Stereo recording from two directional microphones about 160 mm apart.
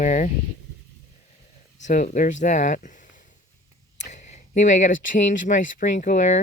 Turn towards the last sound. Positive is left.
turn(degrees=50)  # may be behind; listen again after turning